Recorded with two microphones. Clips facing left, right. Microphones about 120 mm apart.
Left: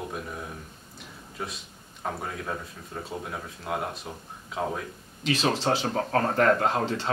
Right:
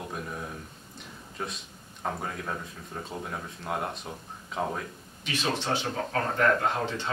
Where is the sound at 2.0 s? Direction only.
Centre (ahead or behind).